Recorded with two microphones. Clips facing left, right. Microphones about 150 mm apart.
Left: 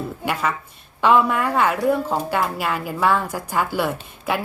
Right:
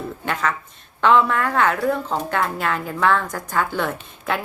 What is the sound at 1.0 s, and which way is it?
Speech, 10° left (ahead or behind).